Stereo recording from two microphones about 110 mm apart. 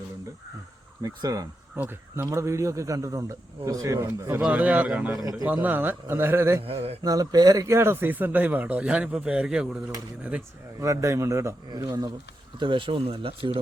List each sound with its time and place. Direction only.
1.0 s speech: 35° right (ahead or behind)
1.7 s speech: 20° right (ahead or behind)
6.7 s speech: 65° right (ahead or behind)
7.0 s speech: 35° right (ahead or behind); by 9.6 s 10° right (ahead or behind)
10.8 s speech: 30° right (ahead or behind)
12.5 s speech: 50° right (ahead or behind)